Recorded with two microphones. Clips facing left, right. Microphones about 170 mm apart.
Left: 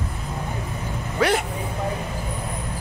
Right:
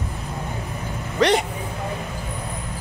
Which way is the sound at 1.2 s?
5° left (ahead or behind).